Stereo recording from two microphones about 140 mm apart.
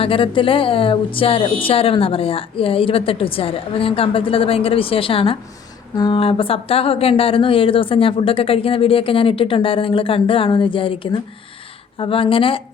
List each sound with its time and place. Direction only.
0.0 s a woman's voice: 40° left (ahead or behind)